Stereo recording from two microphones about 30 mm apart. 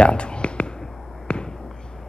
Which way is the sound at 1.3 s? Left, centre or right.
Left.